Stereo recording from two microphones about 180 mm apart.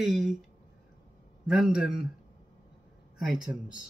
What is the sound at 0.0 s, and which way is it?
Speech, centre (ahead or behind).